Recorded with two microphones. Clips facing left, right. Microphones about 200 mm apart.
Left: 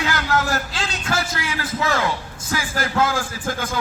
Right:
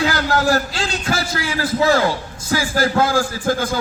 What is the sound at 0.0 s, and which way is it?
A man's voice, 35° right (ahead or behind).